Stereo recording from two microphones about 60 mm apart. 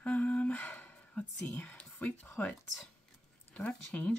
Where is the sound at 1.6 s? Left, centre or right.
Left.